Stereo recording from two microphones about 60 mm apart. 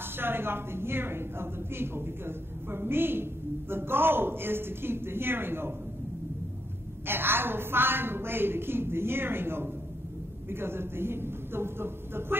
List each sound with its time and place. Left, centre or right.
0.2 s a woman's voice: right
7.1 s a woman's voice: right